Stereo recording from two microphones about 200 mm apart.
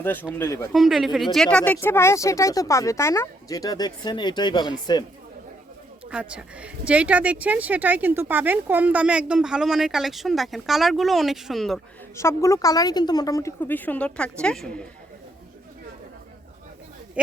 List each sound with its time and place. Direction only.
0.0 s speech: 10° left (ahead or behind)
0.7 s speech: centre (ahead or behind); by 5.0 s 20° left (ahead or behind)
6.1 s speech: 5° right (ahead or behind)
12.1 s speech: 15° left (ahead or behind)